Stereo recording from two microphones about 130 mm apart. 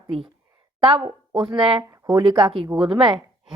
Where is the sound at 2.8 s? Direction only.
45° right (ahead or behind).